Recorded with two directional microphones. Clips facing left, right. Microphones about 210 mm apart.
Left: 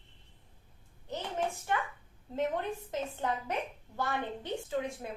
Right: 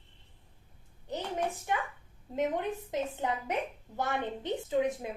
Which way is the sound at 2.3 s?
15° right (ahead or behind).